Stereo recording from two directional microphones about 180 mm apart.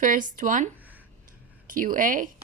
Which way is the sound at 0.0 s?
45° right (ahead or behind).